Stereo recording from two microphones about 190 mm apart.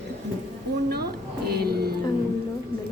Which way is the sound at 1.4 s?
55° right (ahead or behind).